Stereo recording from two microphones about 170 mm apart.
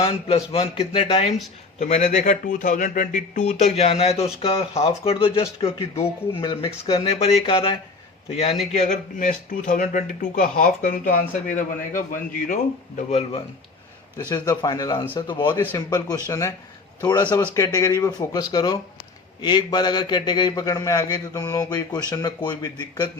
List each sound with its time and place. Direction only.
0.0 s a man's voice: 30° left (ahead or behind)
1.8 s a man's voice: 45° left (ahead or behind)
8.7 s speech: 45° left (ahead or behind)
13.1 s a man's voice: 40° left (ahead or behind)
14.3 s a man's voice: 25° left (ahead or behind)